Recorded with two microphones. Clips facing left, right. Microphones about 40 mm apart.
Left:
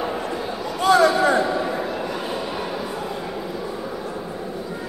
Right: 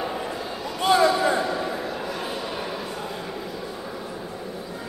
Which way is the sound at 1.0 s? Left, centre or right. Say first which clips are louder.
Left 3 dB; left.